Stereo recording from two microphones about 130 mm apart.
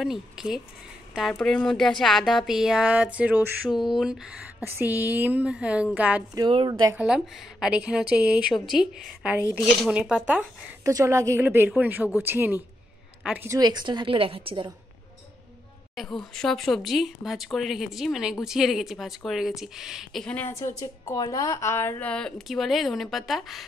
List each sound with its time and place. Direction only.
0.0 s speech: 5° right (ahead or behind)
3.7 s a woman's voice: centre (ahead or behind)
6.7 s a woman's voice: 25° right (ahead or behind)
7.0 s a woman's voice: 5° right (ahead or behind)
10.8 s a woman's voice: 25° right (ahead or behind)
13.5 s a woman's voice: 30° right (ahead or behind)
16.0 s speech: 5° left (ahead or behind)
20.3 s a woman's voice: 20° left (ahead or behind); by 23.6 s centre (ahead or behind)